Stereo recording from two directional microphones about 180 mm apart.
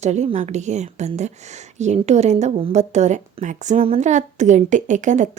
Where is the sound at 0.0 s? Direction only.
40° right (ahead or behind).